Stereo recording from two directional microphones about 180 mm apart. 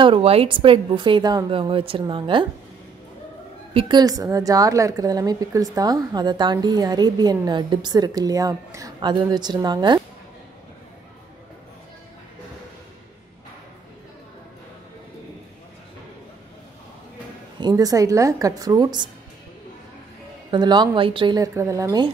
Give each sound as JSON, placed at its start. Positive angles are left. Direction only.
{"t": 0.0, "sound": "a woman's voice", "side_deg": -30}
{"t": 3.7, "sound": "a woman's voice", "side_deg": -20}
{"t": 17.6, "sound": "a woman's voice", "side_deg": -20}
{"t": 20.5, "sound": "a woman's voice", "side_deg": -25}